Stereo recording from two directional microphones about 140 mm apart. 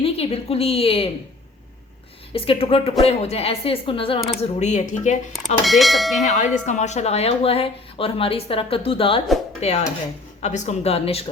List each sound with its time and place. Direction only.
0.0 s a woman's voice: 45° left (ahead or behind)
2.3 s a woman's voice: 40° left (ahead or behind)
4.3 s speech: 55° left (ahead or behind)
5.6 s speech: centre (ahead or behind)
6.2 s a woman's voice: 60° left (ahead or behind)